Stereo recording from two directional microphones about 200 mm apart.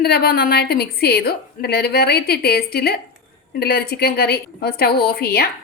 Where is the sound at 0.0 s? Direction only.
50° left (ahead or behind).